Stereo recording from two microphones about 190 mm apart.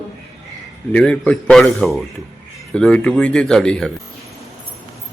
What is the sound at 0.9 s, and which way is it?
Speech, 5° left (ahead or behind).